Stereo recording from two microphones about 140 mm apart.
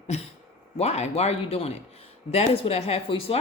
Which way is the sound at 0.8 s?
50° left (ahead or behind).